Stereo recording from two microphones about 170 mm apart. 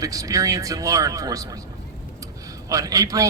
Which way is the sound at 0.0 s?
20° right (ahead or behind).